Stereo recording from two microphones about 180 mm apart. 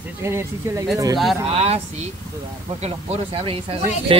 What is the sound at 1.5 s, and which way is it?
Speech, 35° right (ahead or behind).